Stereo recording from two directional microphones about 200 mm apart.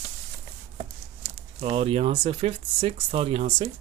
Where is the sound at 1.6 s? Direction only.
30° right (ahead or behind).